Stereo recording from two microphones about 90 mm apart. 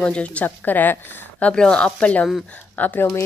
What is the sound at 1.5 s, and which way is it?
Speech, 10° left (ahead or behind).